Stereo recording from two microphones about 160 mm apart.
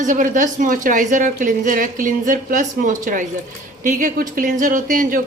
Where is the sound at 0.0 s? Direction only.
55° right (ahead or behind).